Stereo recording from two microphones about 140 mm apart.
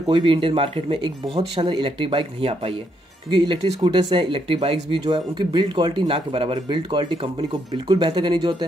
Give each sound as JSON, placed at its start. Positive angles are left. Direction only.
{"t": 0.0, "sound": "speech", "side_deg": -35}